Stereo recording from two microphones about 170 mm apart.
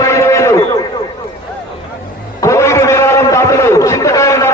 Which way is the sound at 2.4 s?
15° left (ahead or behind).